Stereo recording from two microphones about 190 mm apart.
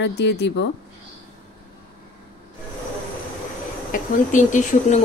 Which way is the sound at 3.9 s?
45° left (ahead or behind).